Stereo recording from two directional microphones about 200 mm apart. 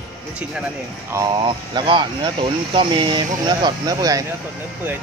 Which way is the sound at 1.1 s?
20° right (ahead or behind).